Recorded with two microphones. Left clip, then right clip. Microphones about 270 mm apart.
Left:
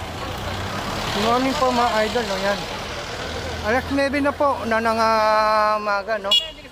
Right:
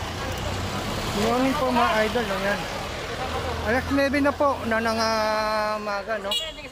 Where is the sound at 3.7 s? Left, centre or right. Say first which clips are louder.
Left 3 dB; centre.